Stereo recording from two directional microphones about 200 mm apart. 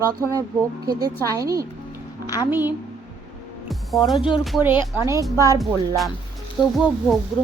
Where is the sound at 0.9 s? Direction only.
20° right (ahead or behind).